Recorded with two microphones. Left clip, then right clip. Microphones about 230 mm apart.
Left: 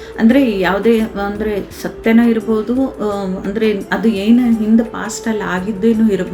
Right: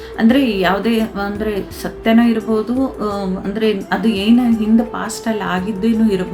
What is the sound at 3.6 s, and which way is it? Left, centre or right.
A woman's voice, centre.